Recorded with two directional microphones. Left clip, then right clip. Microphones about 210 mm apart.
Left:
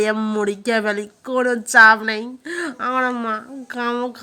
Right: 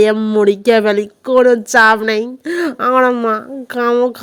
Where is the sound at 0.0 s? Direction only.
30° right (ahead or behind).